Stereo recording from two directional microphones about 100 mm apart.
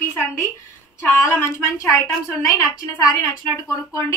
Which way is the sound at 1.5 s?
25° left (ahead or behind).